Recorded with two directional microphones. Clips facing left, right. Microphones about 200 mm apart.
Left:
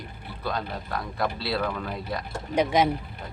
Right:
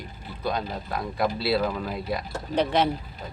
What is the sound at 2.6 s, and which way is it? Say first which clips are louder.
Speech: left 1 dB; 10° left (ahead or behind).